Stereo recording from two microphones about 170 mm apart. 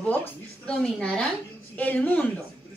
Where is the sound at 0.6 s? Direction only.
5° left (ahead or behind).